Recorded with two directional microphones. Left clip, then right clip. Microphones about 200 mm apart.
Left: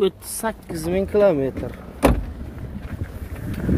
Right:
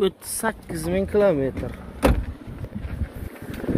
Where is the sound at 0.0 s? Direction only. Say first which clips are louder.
Left 1 dB; centre (ahead or behind).